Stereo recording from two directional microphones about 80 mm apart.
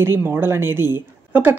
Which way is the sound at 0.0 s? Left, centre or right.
Right.